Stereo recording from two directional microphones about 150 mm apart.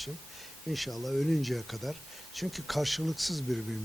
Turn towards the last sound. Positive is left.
turn(degrees=0)  # may be behind; listen again after turning